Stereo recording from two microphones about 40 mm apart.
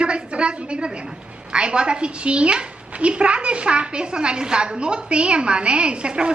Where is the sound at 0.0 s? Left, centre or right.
Right.